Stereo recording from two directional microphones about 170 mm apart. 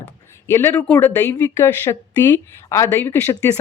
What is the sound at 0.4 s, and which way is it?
Speech, 15° left (ahead or behind).